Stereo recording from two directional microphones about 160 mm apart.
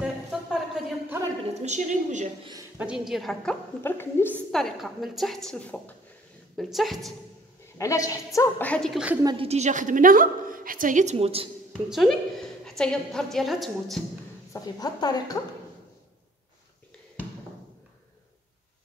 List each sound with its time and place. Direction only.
0.0 s a sound: centre (ahead or behind)
1.5 s a woman's voice: 45° right (ahead or behind)
2.8 s a woman's voice: 5° right (ahead or behind)
3.8 s a woman's voice: 15° left (ahead or behind)
4.6 s a woman's voice: centre (ahead or behind)
7.7 s a woman's voice: 20° left (ahead or behind)
9.2 s a woman's voice: 25° right (ahead or behind)
9.5 s a woman's voice: 45° right (ahead or behind)
11.7 s a woman's voice: centre (ahead or behind)
14.5 s a woman's voice: 25° left (ahead or behind)